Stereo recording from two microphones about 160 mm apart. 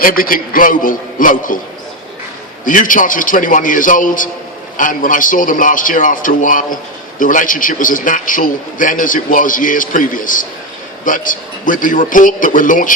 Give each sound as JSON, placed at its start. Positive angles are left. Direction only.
{"t": 0.0, "sound": "a man's voice", "side_deg": 65}
{"t": 2.6, "sound": "a man's voice", "side_deg": 55}